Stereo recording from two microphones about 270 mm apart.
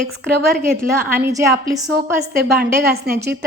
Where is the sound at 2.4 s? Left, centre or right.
Right.